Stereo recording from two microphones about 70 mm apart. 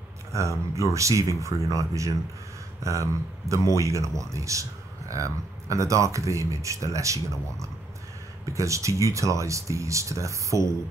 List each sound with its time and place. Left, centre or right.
0.3 s a man's voice: right
8.5 s a man's voice: right